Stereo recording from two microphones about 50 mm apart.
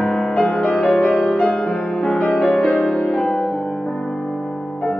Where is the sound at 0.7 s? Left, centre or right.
Centre.